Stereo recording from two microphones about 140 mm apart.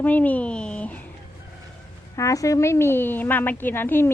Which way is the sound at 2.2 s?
20° left (ahead or behind).